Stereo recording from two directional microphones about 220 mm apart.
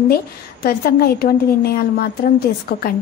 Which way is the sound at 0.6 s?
45° left (ahead or behind).